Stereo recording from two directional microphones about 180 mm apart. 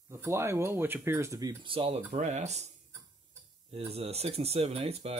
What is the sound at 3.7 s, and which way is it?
Speech, 35° right (ahead or behind).